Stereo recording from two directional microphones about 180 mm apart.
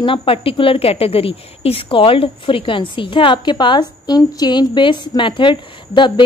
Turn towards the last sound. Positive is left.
turn(degrees=25)  # may be behind; listen again after turning